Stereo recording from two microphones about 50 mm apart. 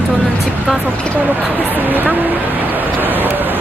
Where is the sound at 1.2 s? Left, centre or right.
Right.